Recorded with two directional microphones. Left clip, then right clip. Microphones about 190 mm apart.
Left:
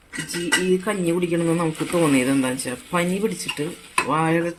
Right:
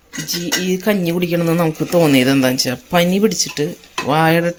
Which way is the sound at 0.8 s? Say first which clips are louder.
Right 5 dB; 55° right (ahead or behind).